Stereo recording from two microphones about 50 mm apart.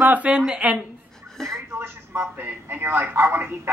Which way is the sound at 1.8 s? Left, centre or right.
Right.